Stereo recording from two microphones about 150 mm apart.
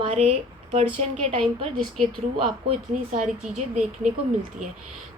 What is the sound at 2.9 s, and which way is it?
Speech, 55° right (ahead or behind).